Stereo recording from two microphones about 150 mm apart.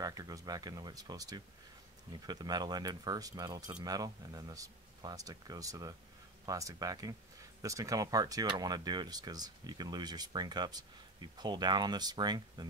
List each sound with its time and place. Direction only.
0.0 s speech: 25° right (ahead or behind)